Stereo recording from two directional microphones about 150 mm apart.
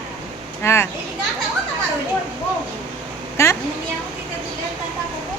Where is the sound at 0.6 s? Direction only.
15° left (ahead or behind).